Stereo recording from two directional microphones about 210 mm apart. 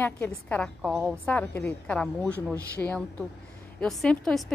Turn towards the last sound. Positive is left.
turn(degrees=0)  # may be behind; listen again after turning